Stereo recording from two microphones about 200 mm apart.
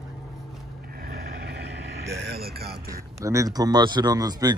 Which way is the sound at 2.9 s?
15° right (ahead or behind).